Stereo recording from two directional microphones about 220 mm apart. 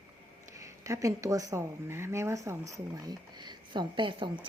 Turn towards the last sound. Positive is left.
turn(degrees=-20)  # may be behind; listen again after turning